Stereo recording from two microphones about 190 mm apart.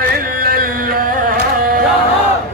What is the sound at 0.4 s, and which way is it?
Carnatic music, 50° right (ahead or behind).